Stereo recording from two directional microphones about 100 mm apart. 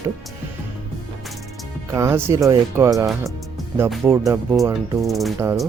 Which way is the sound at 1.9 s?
30° right (ahead or behind).